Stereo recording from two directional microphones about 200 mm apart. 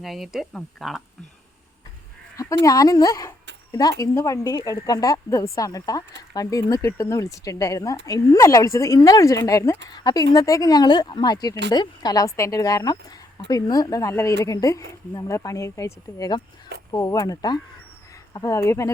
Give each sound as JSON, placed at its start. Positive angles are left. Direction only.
{"t": 0.0, "sound": "speech", "side_deg": 0}
{"t": 2.3, "sound": "a sound", "side_deg": 15}
{"t": 2.6, "sound": "speech", "side_deg": 15}